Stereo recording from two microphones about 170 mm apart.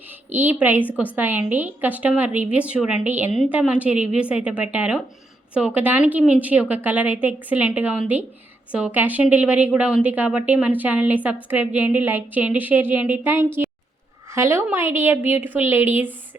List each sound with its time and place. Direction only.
0.1 s a woman's voice: 10° right (ahead or behind)